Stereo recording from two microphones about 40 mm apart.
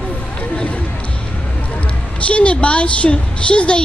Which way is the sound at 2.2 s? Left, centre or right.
Left.